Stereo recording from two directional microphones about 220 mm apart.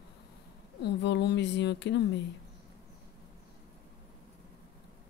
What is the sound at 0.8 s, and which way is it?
Speech, 50° left (ahead or behind).